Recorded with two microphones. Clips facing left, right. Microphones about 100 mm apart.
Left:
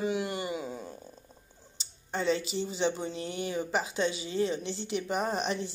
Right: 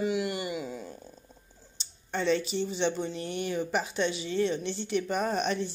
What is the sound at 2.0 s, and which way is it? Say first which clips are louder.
Speech: right 2 dB; 30° left (ahead or behind).